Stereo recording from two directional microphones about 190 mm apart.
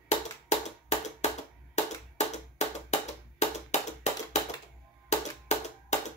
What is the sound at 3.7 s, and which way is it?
Tap, 35° left (ahead or behind).